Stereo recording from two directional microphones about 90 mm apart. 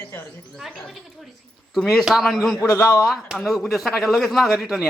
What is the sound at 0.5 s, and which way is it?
Speech, centre (ahead or behind).